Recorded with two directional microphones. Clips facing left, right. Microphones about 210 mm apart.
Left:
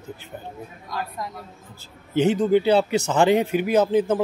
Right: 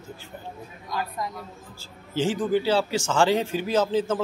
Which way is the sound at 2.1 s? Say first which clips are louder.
Left 5 dB; 20° left (ahead or behind).